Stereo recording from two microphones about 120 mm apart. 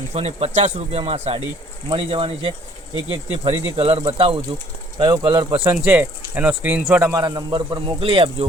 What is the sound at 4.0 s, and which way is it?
Speech, 40° right (ahead or behind).